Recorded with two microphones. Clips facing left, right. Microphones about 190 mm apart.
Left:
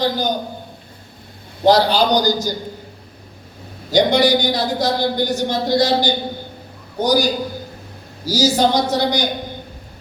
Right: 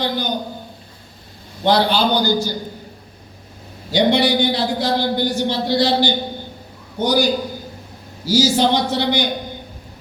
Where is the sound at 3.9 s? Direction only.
40° left (ahead or behind).